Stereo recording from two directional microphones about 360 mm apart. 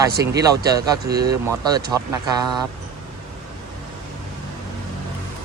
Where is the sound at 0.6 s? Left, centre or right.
Centre.